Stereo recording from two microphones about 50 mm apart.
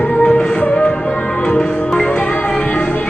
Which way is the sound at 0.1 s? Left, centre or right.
Left.